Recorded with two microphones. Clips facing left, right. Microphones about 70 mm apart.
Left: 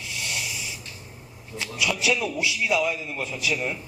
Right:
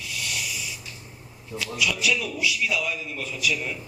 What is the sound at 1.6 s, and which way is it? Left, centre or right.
A man's voice, left.